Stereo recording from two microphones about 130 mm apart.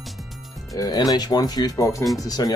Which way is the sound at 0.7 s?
30° left (ahead or behind).